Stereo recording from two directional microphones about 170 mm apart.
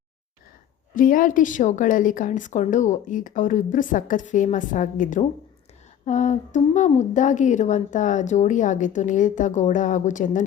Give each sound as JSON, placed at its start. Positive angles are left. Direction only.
{"t": 0.9, "sound": "a woman's voice", "side_deg": 55}